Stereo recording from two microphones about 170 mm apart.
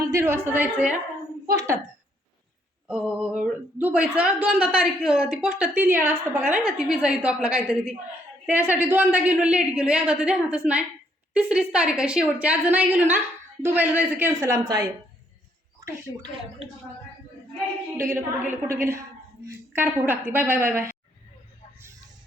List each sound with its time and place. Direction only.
0.0 s speech: 15° right (ahead or behind)
1.5 s a woman's voice: 20° right (ahead or behind)
2.8 s speech: 5° right (ahead or behind)
17.9 s speech: 15° right (ahead or behind)